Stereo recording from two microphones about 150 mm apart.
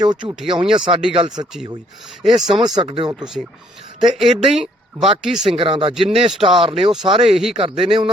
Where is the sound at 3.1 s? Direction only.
5° right (ahead or behind).